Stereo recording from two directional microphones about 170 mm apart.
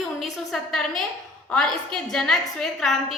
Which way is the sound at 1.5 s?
5° left (ahead or behind).